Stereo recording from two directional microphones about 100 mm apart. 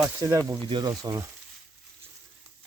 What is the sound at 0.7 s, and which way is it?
Speech, 45° right (ahead or behind).